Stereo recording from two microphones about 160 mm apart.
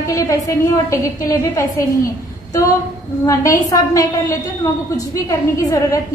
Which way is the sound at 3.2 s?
20° left (ahead or behind).